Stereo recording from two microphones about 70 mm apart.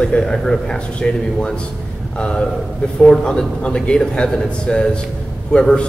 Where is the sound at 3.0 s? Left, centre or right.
Centre.